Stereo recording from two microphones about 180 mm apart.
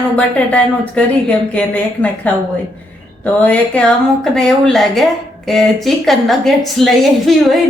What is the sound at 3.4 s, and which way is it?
A woman's voice, 5° left (ahead or behind).